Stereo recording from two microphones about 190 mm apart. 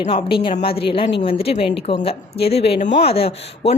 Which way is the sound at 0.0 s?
30° left (ahead or behind).